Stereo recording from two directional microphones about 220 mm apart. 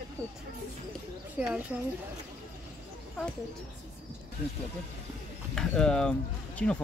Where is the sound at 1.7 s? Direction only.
5° right (ahead or behind).